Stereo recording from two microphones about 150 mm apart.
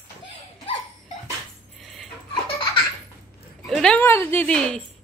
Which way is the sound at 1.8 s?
Centre (ahead or behind).